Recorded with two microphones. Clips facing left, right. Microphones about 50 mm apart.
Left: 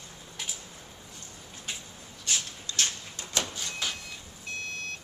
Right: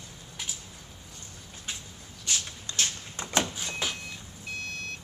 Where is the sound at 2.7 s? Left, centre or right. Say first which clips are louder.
Even; right.